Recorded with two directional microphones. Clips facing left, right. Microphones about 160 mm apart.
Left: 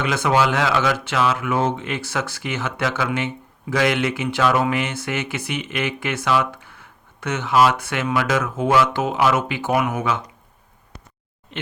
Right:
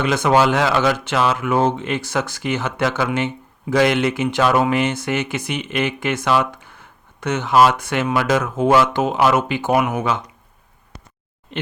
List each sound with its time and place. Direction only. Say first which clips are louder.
0.0 s speech: right 3 dB; 35° right (ahead or behind)
9.6 s speech: right 3 dB; 20° right (ahead or behind)